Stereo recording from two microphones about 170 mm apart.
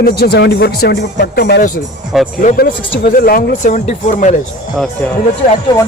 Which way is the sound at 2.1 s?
Centre (ahead or behind).